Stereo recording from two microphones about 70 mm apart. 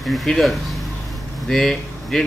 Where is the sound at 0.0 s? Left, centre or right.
Centre.